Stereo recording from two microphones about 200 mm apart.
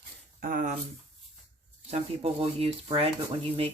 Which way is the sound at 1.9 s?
30° right (ahead or behind).